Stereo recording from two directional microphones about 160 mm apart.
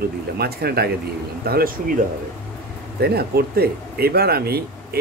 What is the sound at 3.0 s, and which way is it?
Speech, 75° right (ahead or behind).